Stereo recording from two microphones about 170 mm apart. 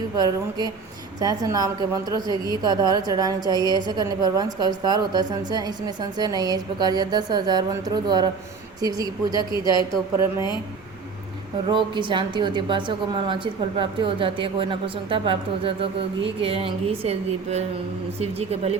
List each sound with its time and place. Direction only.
0.2 s a woman's voice: 25° right (ahead or behind)
9.4 s a woman's voice: 25° left (ahead or behind)
11.7 s a woman's voice: 30° right (ahead or behind)